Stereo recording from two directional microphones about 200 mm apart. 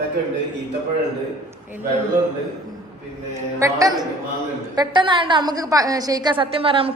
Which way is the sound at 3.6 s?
20° right (ahead or behind).